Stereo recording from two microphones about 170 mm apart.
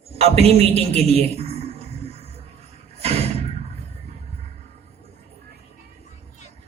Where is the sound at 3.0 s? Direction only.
35° right (ahead or behind).